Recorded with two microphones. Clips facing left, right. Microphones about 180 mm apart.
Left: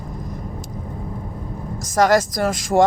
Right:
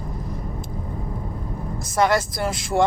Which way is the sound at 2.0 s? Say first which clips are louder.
Left 4 dB; 45° left (ahead or behind).